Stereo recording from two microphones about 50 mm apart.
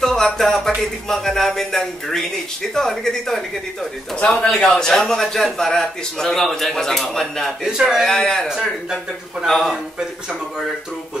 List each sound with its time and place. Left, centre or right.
0.0 s a sound: centre
1.0 s a man's voice: centre
4.2 s a man's voice: left
4.6 s a man's voice: centre
8.5 s speech: centre